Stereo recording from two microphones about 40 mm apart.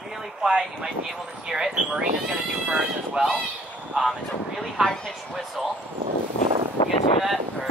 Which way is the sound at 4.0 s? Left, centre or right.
Centre.